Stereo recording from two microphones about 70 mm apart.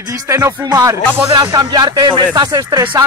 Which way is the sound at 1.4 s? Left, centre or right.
Right.